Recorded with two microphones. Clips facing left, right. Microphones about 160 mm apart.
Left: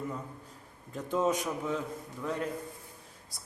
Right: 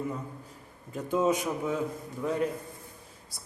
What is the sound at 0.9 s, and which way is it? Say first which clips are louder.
A man's voice: right 3 dB; 5° right (ahead or behind).